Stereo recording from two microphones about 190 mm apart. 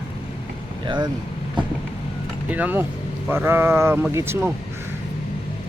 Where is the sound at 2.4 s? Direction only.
10° right (ahead or behind).